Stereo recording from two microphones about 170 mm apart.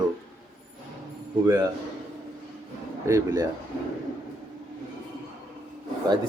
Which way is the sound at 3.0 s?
20° right (ahead or behind).